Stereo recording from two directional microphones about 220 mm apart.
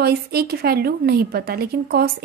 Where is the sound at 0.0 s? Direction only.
45° right (ahead or behind).